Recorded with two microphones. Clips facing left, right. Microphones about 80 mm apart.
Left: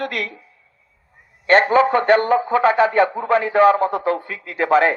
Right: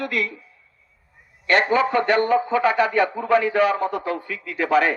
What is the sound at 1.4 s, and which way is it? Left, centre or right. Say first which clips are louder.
A man's voice: left 5 dB; left.